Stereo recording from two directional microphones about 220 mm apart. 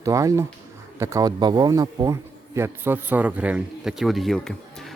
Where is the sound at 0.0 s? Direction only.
15° right (ahead or behind).